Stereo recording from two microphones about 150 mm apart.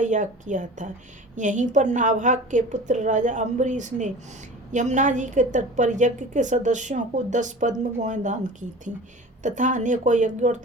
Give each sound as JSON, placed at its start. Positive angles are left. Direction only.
{"t": 0.0, "sound": "a woman's voice", "side_deg": -55}
{"t": 9.4, "sound": "a woman's voice", "side_deg": -55}